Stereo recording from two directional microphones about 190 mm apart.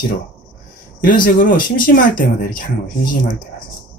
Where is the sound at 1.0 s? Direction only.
45° left (ahead or behind).